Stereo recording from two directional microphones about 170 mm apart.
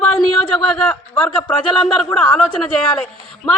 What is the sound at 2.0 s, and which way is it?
Speech, 10° left (ahead or behind).